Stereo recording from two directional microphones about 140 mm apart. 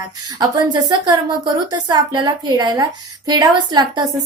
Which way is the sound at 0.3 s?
30° right (ahead or behind).